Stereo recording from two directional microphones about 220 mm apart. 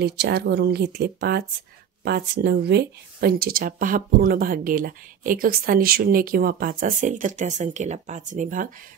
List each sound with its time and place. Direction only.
0.0 s speech: 45° right (ahead or behind)